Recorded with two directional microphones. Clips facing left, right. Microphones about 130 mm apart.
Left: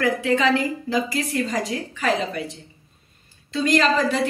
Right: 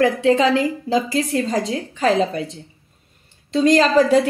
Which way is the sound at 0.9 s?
30° right (ahead or behind).